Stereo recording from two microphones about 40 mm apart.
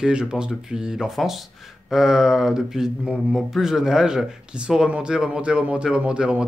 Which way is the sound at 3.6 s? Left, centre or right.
Centre.